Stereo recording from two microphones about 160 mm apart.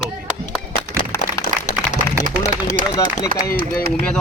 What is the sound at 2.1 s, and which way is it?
Speech, 50° left (ahead or behind).